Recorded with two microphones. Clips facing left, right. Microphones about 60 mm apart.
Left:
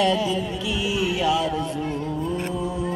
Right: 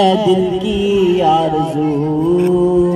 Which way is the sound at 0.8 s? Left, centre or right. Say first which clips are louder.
Right 12 dB; right.